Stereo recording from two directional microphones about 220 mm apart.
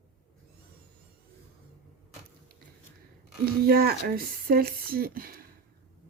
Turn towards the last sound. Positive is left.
turn(degrees=-40)  # may be behind; listen again after turning